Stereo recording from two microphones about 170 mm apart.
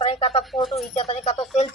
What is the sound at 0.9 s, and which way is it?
Speech, 35° left (ahead or behind).